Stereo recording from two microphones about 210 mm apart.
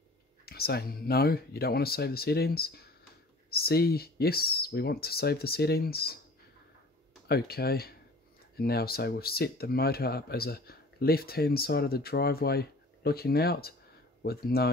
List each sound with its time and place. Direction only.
0.5 s speech: 50° left (ahead or behind)
7.2 s speech: 50° left (ahead or behind)